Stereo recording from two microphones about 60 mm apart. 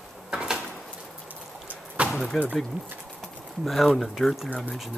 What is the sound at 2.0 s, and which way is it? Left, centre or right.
Slam, centre.